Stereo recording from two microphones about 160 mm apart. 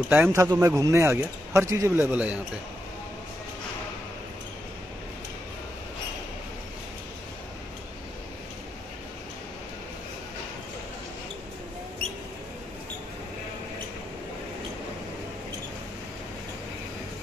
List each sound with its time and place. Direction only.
0.1 s speech: 15° right (ahead or behind)
12.0 s mouse: 35° right (ahead or behind)